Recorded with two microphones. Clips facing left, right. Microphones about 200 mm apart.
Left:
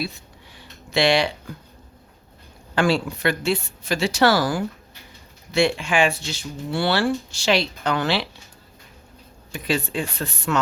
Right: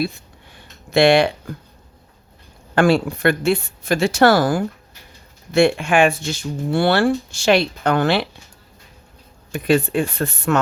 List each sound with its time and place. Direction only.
0.0 s a sound: 50° right (ahead or behind)
2.7 s speech: 55° right (ahead or behind)
9.5 s speech: 55° right (ahead or behind)